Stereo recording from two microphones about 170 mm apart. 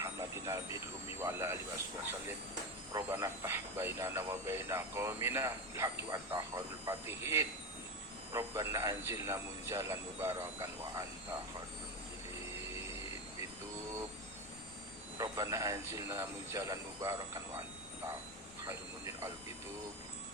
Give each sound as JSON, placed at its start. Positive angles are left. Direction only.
{"t": 0.0, "sound": "vehicle", "side_deg": -15}
{"t": 1.2, "sound": "a man's voice", "side_deg": -15}
{"t": 2.9, "sound": "a man's voice", "side_deg": -15}
{"t": 15.2, "sound": "a man's voice", "side_deg": -20}